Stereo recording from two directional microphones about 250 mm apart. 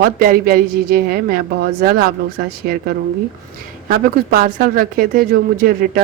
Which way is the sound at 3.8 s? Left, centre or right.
Right.